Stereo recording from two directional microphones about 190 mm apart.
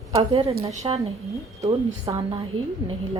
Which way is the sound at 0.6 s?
35° right (ahead or behind).